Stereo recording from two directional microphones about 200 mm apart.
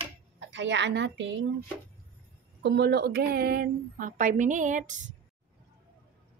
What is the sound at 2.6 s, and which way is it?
A woman's voice, 55° right (ahead or behind).